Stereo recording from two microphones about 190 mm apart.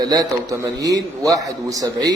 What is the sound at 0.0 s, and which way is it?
A man's voice, 20° right (ahead or behind).